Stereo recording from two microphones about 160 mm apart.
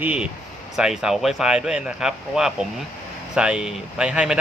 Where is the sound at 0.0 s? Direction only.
5° right (ahead or behind).